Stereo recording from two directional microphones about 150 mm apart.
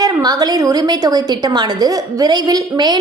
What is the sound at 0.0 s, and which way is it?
A woman's voice, 25° right (ahead or behind).